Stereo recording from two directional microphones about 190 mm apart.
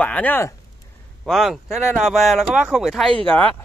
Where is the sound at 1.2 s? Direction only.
Centre (ahead or behind).